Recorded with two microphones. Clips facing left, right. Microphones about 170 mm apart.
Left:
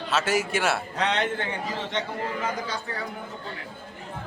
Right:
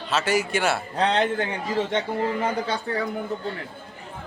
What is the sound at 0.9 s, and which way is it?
Speech, 35° right (ahead or behind).